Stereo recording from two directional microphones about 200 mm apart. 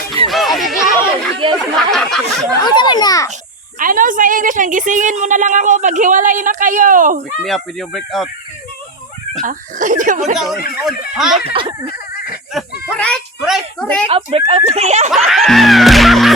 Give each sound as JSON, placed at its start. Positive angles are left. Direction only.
{"t": 0.3, "sound": "music", "side_deg": 0}
{"t": 0.9, "sound": "chatter", "side_deg": 10}
{"t": 1.7, "sound": "a sound", "side_deg": 0}
{"t": 2.6, "sound": "a child's voice", "side_deg": 20}
{"t": 3.8, "sound": "a woman's voice", "side_deg": -40}
{"t": 7.4, "sound": "music", "side_deg": 0}
{"t": 9.4, "sound": "a woman's voice", "side_deg": -40}
{"t": 10.3, "sound": "music", "side_deg": 0}
{"t": 11.4, "sound": "speech", "side_deg": -25}
{"t": 12.6, "sound": "a sound", "side_deg": 0}
{"t": 13.0, "sound": "speech", "side_deg": 0}
{"t": 14.1, "sound": "a woman's voice", "side_deg": -30}
{"t": 15.3, "sound": "music", "side_deg": 0}